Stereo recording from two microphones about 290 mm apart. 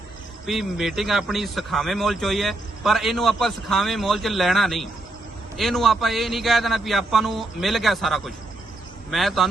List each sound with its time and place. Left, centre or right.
0.4 s a man's voice: centre